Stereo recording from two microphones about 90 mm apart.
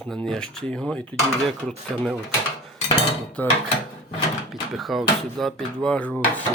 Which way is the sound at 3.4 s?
15° left (ahead or behind).